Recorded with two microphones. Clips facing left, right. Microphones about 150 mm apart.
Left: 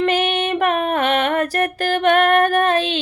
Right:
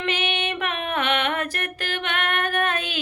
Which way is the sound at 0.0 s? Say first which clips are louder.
Left 8 dB; 45° left (ahead or behind).